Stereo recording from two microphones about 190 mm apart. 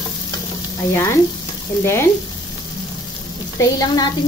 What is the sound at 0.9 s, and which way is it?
Speech, 15° left (ahead or behind).